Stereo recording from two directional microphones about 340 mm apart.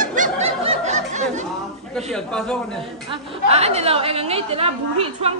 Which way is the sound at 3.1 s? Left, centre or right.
Centre.